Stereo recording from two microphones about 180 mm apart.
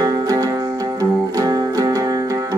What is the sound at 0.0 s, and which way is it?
Music, 20° right (ahead or behind).